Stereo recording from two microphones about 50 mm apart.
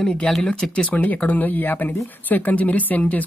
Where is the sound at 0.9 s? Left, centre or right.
Left.